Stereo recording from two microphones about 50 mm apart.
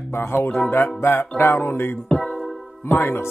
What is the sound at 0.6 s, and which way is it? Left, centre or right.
Speech, left.